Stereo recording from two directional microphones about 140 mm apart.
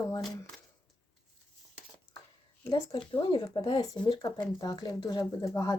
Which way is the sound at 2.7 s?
35° left (ahead or behind).